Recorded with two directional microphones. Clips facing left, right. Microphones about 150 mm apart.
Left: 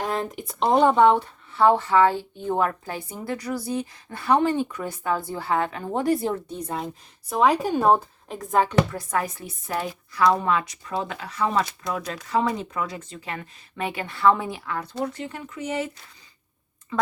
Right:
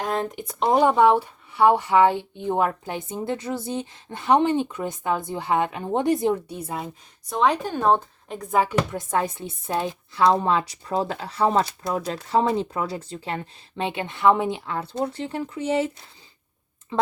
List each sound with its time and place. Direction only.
0.2 s speech: centre (ahead or behind)
7.3 s speech: 5° left (ahead or behind)
8.9 s speech: 25° right (ahead or behind)